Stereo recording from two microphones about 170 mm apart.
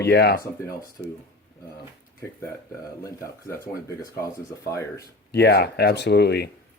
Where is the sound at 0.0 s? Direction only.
75° left (ahead or behind).